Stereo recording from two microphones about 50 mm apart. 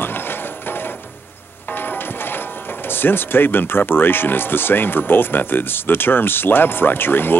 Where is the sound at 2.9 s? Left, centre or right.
Left.